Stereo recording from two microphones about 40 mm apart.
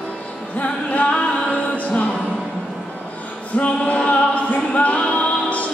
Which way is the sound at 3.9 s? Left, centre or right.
Left.